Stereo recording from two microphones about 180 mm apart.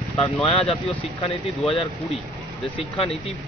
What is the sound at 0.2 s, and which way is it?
Speech, 30° left (ahead or behind).